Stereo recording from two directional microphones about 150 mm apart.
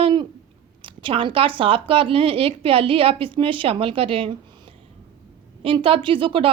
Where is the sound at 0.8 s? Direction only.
35° right (ahead or behind).